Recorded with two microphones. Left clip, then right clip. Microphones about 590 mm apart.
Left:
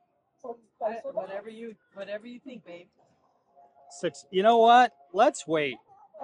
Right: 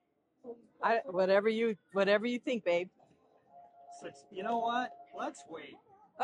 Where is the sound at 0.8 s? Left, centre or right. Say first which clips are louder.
Right 3 dB; right.